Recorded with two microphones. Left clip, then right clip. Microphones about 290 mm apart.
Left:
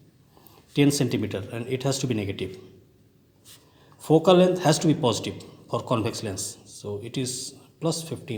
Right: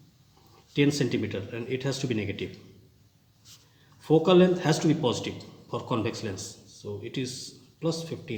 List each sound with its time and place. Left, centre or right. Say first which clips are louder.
0.7 s speech: left 3 dB; left
4.0 s speech: left 3 dB; left